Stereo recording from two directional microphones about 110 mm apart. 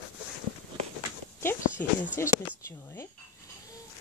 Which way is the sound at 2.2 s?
25° left (ahead or behind).